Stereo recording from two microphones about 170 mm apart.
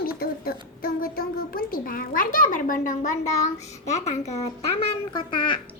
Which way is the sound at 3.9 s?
40° left (ahead or behind).